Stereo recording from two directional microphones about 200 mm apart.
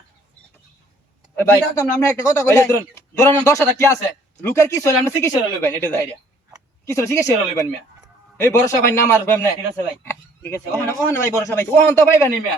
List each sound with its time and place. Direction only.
1.4 s a man's voice: 15° left (ahead or behind)
8.4 s a man's voice: 15° left (ahead or behind)